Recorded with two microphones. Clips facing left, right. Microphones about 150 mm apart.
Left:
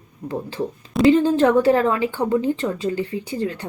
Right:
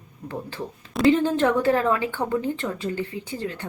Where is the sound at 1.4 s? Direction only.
15° left (ahead or behind).